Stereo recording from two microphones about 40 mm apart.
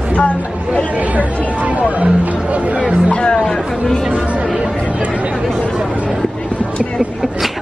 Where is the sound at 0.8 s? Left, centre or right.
Right.